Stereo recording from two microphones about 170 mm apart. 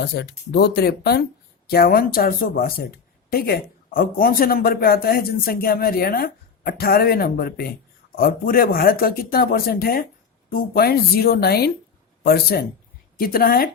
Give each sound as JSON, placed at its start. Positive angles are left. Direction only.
{"t": 0.0, "sound": "speech", "side_deg": 70}